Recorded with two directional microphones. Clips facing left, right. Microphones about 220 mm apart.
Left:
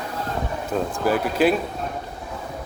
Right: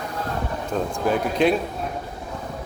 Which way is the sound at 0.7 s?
5° left (ahead or behind).